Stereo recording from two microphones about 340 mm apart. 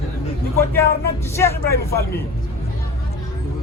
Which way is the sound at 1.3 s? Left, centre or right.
Centre.